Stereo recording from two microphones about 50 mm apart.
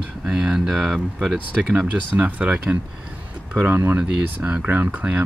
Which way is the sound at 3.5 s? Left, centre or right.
Right.